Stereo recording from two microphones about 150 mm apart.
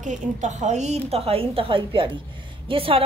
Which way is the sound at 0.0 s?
55° right (ahead or behind).